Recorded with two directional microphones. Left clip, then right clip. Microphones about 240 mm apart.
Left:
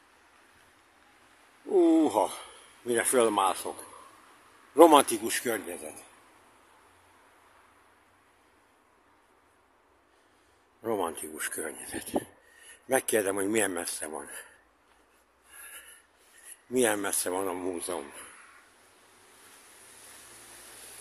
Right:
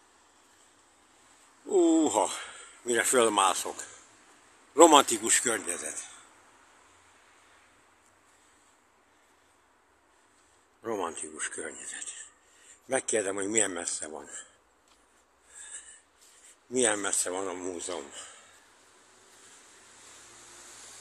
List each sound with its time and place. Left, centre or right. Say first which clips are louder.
1.7 s speech: left 1 dB; centre
4.7 s a man's voice: even; centre
10.8 s speech: left 2 dB; centre
16.7 s speech: left 1 dB; centre
20.5 s a sound: right 1 dB; left